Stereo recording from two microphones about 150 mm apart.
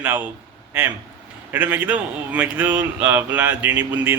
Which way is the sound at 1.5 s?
10° right (ahead or behind).